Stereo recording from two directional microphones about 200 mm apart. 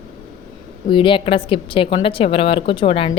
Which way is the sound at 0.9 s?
25° left (ahead or behind).